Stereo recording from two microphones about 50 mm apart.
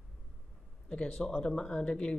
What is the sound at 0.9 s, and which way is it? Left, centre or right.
Speech, centre.